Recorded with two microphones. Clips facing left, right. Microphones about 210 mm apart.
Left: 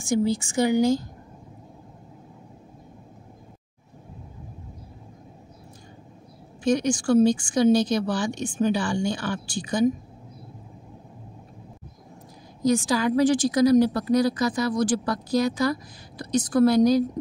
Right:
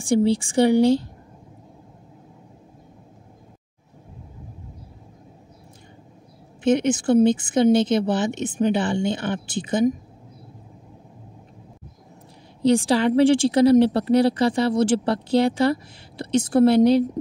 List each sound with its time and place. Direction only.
0.3 s speech: 30° right (ahead or behind)
6.6 s speech: 25° right (ahead or behind)
12.6 s speech: 30° right (ahead or behind)